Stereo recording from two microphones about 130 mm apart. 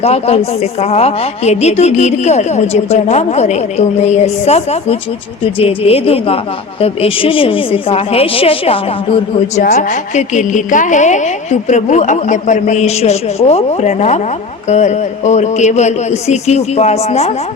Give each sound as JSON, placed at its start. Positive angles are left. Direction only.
{"t": 0.0, "sound": "a woman's voice", "side_deg": 50}
{"t": 9.6, "sound": "a woman's voice", "side_deg": 65}